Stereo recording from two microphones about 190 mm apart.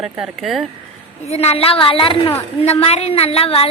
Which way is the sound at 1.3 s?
35° left (ahead or behind).